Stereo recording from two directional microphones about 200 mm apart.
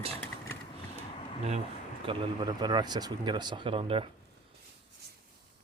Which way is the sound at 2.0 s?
25° right (ahead or behind).